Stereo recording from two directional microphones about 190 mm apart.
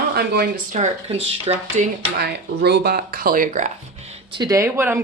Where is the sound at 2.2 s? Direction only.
60° right (ahead or behind); by 4.1 s 40° right (ahead or behind).